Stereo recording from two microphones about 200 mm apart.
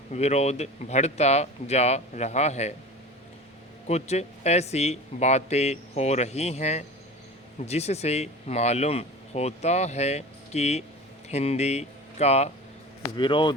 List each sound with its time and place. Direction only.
0.1 s speech: 35° left (ahead or behind)
3.8 s speech: 35° left (ahead or behind)